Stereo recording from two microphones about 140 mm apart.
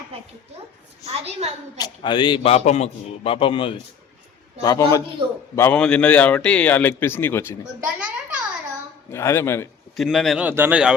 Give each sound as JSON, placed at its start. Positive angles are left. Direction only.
{"t": 1.2, "sound": "a woman's voice", "side_deg": -50}
{"t": 1.8, "sound": "a man's voice", "side_deg": 35}
{"t": 4.6, "sound": "a man's voice", "side_deg": 25}
{"t": 5.5, "sound": "a man's voice", "side_deg": 10}
{"t": 7.9, "sound": "a sound", "side_deg": -10}
{"t": 9.1, "sound": "a man's voice", "side_deg": 20}
{"t": 9.9, "sound": "speech", "side_deg": 0}
{"t": 10.4, "sound": "speech", "side_deg": -15}